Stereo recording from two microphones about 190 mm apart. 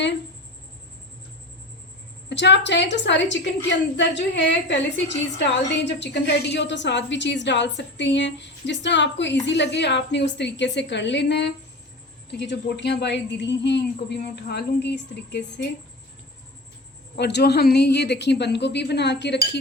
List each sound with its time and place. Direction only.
2.3 s a woman's voice: 65° left (ahead or behind)
17.2 s a woman's voice: 60° left (ahead or behind)